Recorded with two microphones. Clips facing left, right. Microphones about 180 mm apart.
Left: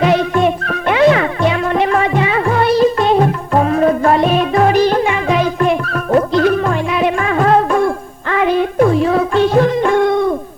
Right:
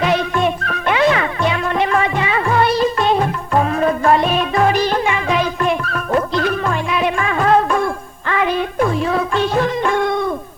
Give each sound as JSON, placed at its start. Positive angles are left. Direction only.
{"t": 0.0, "sound": "music", "side_deg": 45}